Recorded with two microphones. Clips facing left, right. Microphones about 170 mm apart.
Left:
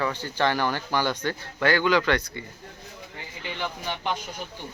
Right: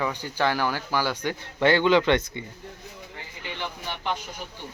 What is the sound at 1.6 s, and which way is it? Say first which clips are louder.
Speech: right 3 dB; 25° right (ahead or behind).